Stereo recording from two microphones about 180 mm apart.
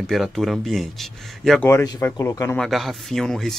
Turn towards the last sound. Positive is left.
turn(degrees=0)  # may be behind; listen again after turning